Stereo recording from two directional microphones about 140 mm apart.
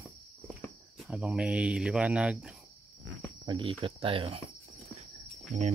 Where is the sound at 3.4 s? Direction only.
40° right (ahead or behind).